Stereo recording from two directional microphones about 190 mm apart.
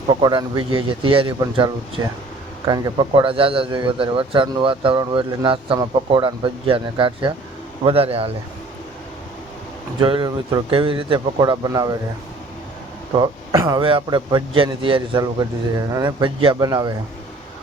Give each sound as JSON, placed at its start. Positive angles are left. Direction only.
{"t": 0.1, "sound": "a man's voice", "side_deg": -25}
{"t": 10.0, "sound": "a man's voice", "side_deg": -25}
{"t": 13.1, "sound": "a man's voice", "side_deg": -20}